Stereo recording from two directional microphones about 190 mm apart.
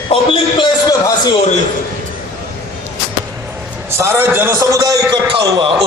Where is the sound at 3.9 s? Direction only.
15° right (ahead or behind).